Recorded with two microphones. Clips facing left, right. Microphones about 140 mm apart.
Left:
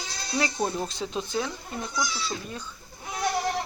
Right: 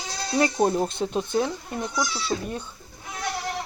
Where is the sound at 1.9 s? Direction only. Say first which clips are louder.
Right 4 dB; 60° right (ahead or behind).